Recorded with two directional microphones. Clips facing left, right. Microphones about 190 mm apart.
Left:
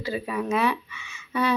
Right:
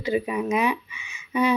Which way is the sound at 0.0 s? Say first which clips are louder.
Right 4 dB; 15° right (ahead or behind).